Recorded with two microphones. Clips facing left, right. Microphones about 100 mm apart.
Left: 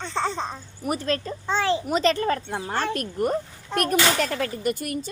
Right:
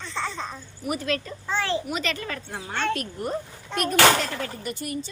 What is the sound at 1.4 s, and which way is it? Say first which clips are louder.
Speech: left 5 dB; 20° left (ahead or behind).